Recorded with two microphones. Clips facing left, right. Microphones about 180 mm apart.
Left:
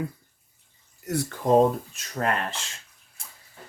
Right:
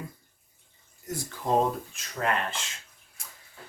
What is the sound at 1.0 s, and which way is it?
Speech, 70° left (ahead or behind).